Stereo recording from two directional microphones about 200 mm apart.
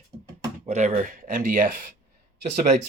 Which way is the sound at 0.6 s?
35° right (ahead or behind).